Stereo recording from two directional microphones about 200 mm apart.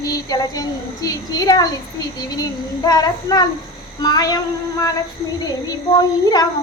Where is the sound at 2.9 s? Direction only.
20° left (ahead or behind).